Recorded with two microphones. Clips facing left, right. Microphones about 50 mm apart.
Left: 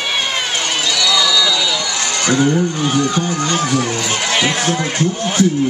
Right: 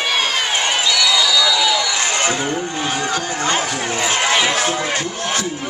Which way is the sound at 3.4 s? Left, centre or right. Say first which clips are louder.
Left 2 dB; right.